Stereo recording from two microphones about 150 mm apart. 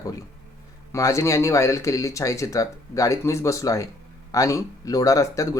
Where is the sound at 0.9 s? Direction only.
20° left (ahead or behind).